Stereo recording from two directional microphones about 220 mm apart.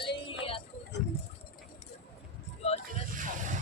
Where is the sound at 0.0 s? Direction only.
25° left (ahead or behind).